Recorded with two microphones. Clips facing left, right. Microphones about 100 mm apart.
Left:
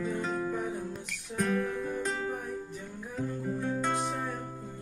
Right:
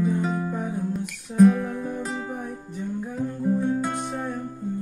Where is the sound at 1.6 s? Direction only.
20° right (ahead or behind).